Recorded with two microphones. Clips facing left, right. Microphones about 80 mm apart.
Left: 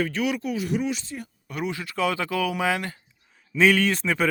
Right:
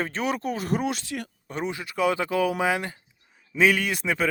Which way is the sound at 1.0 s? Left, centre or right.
Right.